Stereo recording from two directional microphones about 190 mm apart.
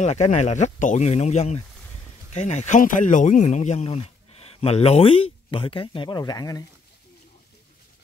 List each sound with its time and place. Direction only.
0.0 s speech: 35° left (ahead or behind); by 6.6 s 20° left (ahead or behind)